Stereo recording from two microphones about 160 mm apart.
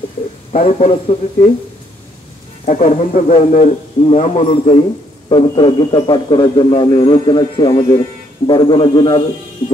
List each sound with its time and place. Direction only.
0.5 s a man's voice: 40° left (ahead or behind)
2.6 s a man's voice: 45° left (ahead or behind)
5.3 s a man's voice: 30° left (ahead or behind)